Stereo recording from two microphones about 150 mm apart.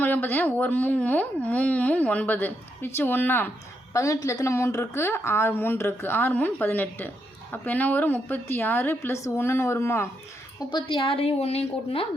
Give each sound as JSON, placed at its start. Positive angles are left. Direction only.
{"t": 0.0, "sound": "speech", "side_deg": 10}
{"t": 10.7, "sound": "a woman's voice", "side_deg": 30}